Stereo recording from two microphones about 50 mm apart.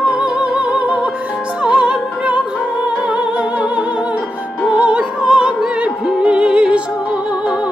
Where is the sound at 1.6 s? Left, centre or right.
Centre.